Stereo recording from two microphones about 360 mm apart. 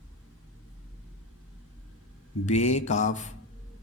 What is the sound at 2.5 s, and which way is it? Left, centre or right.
Mantra, centre.